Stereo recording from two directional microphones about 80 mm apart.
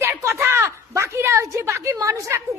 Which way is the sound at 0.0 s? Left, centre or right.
Right.